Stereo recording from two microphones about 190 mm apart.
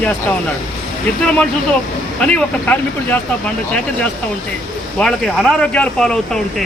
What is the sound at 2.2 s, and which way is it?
Speech, 5° left (ahead or behind).